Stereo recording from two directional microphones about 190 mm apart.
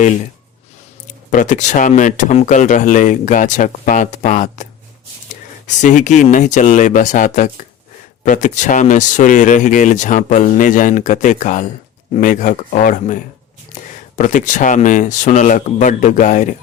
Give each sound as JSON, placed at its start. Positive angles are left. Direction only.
{"t": 1.0, "sound": "speech", "side_deg": 40}
{"t": 14.2, "sound": "speech", "side_deg": 40}